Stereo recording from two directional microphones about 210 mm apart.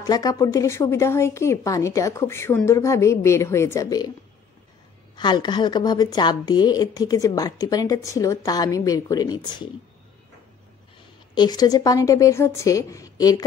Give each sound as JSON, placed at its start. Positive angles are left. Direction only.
{"t": 0.0, "sound": "a woman's voice", "side_deg": 15}
{"t": 5.1, "sound": "a woman's voice", "side_deg": 20}
{"t": 11.3, "sound": "a woman's voice", "side_deg": 20}